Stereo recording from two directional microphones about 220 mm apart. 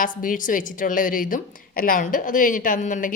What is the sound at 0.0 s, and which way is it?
Speech, 40° left (ahead or behind).